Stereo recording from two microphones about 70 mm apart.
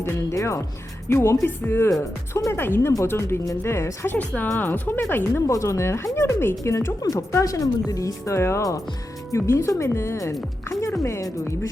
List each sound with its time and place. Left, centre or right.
0.0 s speech: left
5.5 s speech: left
7.0 s speech: left